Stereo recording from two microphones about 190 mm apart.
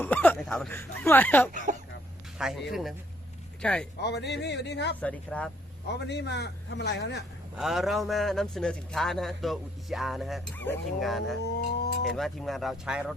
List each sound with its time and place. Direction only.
0.0 s speech: 10° left (ahead or behind)
1.7 s a sound: 40° right (ahead or behind)
2.4 s a man's voice: centre (ahead or behind)
4.0 s a man's voice: 60° left (ahead or behind)
4.9 s speech: 5° left (ahead or behind)
5.9 s a man's voice: 60° left (ahead or behind)
7.6 s a man's voice: centre (ahead or behind)
11.4 s a sound: 60° left (ahead or behind)
12.0 s a man's voice: centre (ahead or behind)